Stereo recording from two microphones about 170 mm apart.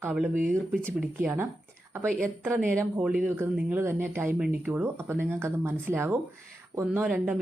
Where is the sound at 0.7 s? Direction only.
Centre (ahead or behind).